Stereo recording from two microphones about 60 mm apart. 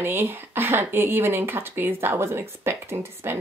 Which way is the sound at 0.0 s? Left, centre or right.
Right.